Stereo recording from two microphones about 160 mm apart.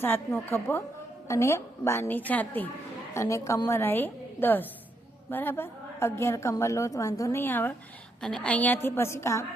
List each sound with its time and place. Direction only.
0.0 s a woman's voice: 15° left (ahead or behind)